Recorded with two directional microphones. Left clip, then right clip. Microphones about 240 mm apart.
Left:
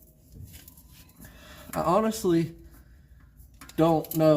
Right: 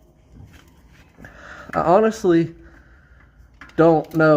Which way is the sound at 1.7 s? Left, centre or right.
Right.